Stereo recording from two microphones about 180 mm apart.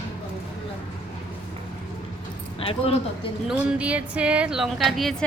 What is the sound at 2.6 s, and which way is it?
Speech, 30° left (ahead or behind).